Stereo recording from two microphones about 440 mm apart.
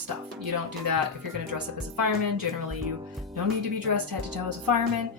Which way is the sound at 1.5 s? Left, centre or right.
Right.